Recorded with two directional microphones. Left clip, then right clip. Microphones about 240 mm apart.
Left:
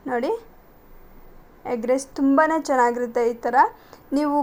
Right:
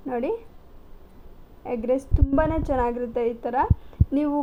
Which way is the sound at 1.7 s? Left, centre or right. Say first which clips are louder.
Left 2 dB; left.